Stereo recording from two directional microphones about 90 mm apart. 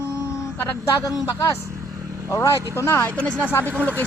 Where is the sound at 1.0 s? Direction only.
40° left (ahead or behind).